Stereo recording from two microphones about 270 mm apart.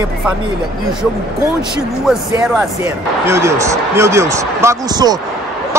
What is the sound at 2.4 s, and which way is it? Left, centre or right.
Speech, centre.